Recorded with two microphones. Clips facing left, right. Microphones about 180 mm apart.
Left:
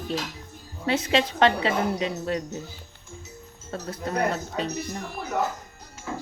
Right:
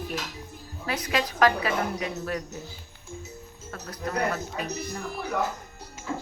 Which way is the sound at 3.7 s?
25° left (ahead or behind).